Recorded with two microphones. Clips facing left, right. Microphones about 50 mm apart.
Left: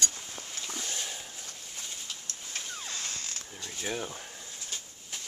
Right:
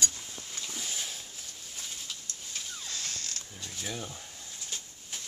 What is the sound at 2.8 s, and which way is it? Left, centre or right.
Zipper, left.